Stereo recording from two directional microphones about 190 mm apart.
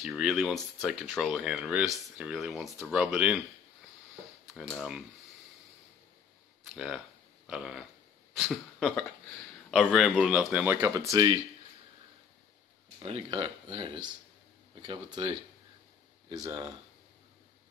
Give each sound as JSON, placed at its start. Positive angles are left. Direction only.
{"t": 0.0, "sound": "speech", "side_deg": 0}
{"t": 4.6, "sound": "speech", "side_deg": 0}
{"t": 6.7, "sound": "speech", "side_deg": 0}
{"t": 13.0, "sound": "speech", "side_deg": -25}